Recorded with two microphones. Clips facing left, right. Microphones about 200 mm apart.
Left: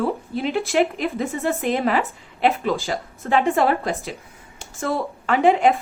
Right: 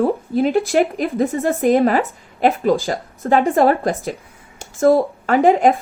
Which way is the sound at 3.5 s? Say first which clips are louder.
Right 5 dB; 50° right (ahead or behind).